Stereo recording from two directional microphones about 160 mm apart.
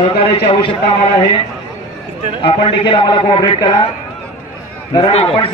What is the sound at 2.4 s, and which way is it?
A man's voice, 35° left (ahead or behind).